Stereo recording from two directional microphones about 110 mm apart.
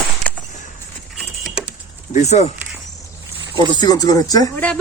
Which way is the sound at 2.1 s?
85° left.